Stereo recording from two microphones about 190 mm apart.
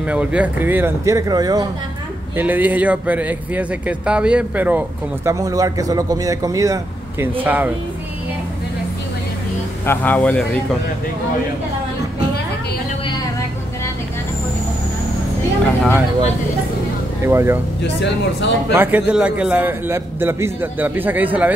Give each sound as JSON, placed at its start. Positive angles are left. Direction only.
{"t": 0.0, "sound": "speech", "side_deg": -5}
{"t": 2.3, "sound": "speech", "side_deg": -10}
{"t": 9.8, "sound": "a man's voice", "side_deg": 10}
{"t": 15.6, "sound": "vehicle", "side_deg": 5}
{"t": 17.3, "sound": "speech", "side_deg": -15}
{"t": 17.8, "sound": "speech", "side_deg": 65}
{"t": 18.7, "sound": "speech", "side_deg": -10}